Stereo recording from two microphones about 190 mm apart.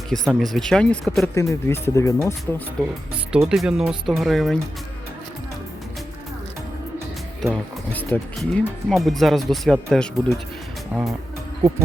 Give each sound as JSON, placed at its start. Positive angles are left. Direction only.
{"t": 0.1, "sound": "speech", "side_deg": 0}
{"t": 1.4, "sound": "speech", "side_deg": 15}
{"t": 3.3, "sound": "speech", "side_deg": 0}
{"t": 7.4, "sound": "speech", "side_deg": 5}